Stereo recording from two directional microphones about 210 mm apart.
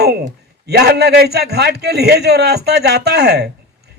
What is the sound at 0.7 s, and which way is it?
A man's voice, 50° right (ahead or behind).